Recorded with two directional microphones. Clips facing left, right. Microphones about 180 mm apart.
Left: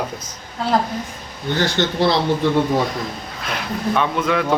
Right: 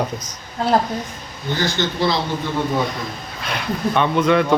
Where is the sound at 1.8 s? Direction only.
60° left (ahead or behind).